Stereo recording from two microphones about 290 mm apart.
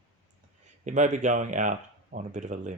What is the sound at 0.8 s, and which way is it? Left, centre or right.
Speech, right.